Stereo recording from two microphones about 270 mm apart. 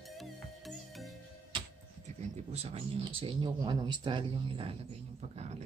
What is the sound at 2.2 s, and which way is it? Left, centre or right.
Speech, right.